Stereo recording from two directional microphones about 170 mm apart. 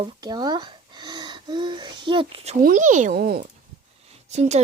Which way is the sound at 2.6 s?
50° right (ahead or behind).